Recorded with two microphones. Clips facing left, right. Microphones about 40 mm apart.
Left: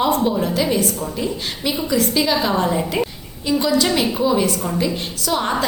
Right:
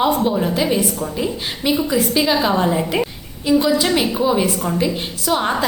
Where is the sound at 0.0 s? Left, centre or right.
Centre.